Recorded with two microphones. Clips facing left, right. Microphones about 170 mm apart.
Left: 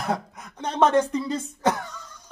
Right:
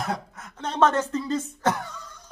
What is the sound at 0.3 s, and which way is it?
Speech, 15° left (ahead or behind).